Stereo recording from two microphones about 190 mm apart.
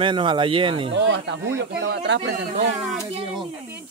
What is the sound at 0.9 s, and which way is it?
Speech, 70° right (ahead or behind).